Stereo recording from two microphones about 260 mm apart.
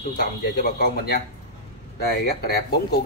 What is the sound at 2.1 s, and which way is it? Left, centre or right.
Speech, left.